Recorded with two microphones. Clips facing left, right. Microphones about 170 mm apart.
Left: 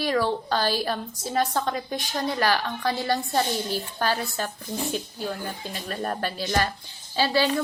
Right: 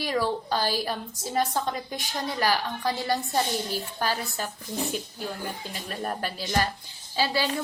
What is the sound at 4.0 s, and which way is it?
Speech, 10° right (ahead or behind).